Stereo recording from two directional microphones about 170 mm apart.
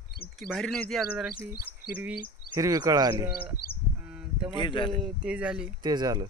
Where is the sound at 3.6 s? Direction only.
65° left (ahead or behind).